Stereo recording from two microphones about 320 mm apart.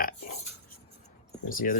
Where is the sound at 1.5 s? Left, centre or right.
Left.